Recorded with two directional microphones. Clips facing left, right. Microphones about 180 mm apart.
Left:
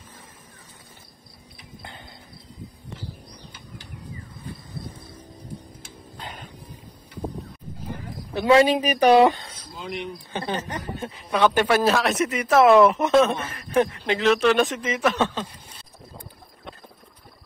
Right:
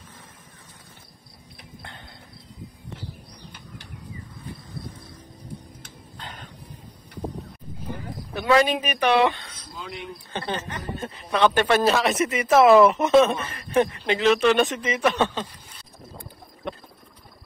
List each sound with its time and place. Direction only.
1.8 s a sound: 5° left (ahead or behind)
6.1 s vehicle: 10° left (ahead or behind)
8.4 s a woman's voice: 30° left (ahead or behind)
9.8 s speech: 15° left (ahead or behind)